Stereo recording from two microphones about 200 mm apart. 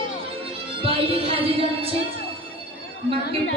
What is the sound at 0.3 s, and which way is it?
Music, 25° right (ahead or behind).